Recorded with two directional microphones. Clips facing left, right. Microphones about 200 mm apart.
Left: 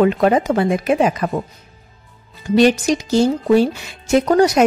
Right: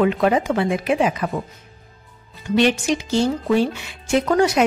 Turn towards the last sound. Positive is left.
turn(degrees=40)  # may be behind; listen again after turning